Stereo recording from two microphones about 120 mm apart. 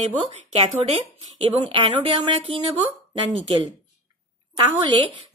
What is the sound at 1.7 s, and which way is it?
A woman's voice, 50° right (ahead or behind).